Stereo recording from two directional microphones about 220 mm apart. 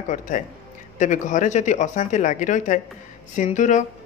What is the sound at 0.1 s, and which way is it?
Speech, 35° left (ahead or behind).